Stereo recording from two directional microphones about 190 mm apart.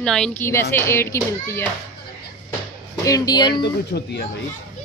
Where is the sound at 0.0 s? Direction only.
5° left (ahead or behind).